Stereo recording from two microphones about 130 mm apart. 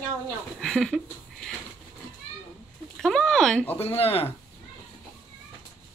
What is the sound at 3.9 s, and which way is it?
Speech, 50° left (ahead or behind).